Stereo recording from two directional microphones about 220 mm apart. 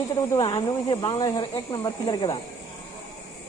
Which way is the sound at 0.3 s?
20° left (ahead or behind).